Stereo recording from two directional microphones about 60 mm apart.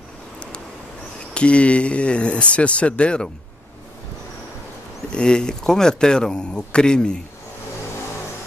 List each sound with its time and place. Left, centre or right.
1.3 s speech: centre
5.1 s speech: centre